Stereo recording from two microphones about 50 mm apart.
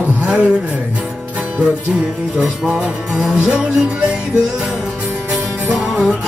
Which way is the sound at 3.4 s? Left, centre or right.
Right.